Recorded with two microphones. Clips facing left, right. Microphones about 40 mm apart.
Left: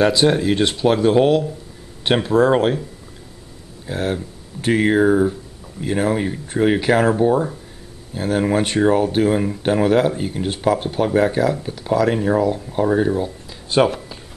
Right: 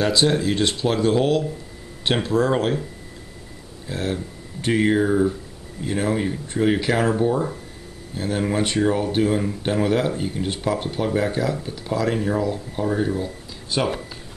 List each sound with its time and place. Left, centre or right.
0.0 s speech: left
3.8 s speech: left
11.5 s speech: centre
11.9 s speech: left
12.2 s speech: centre